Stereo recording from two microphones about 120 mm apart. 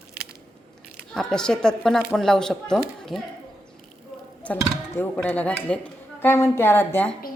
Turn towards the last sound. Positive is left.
turn(degrees=15)  # may be behind; listen again after turning